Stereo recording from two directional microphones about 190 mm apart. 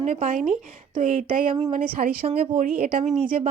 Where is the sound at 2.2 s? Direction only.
35° right (ahead or behind).